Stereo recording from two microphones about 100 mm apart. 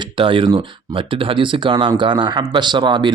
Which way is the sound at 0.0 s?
60° right (ahead or behind).